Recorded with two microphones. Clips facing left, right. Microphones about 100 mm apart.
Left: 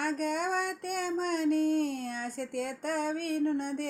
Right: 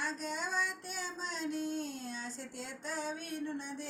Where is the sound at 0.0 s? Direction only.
55° left (ahead or behind).